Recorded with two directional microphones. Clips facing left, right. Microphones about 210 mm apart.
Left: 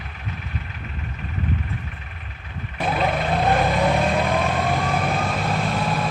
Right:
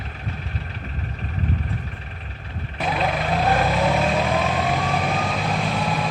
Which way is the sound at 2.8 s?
Centre (ahead or behind).